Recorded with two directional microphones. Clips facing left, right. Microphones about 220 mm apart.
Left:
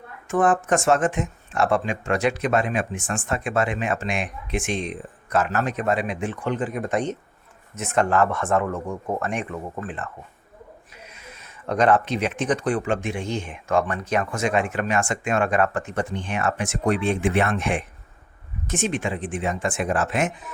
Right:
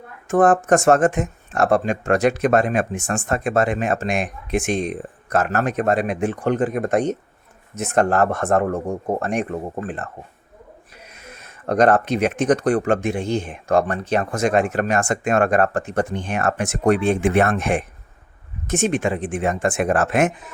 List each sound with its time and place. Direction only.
0.3 s speech: 40° right (ahead or behind)
11.3 s speech: 50° right (ahead or behind)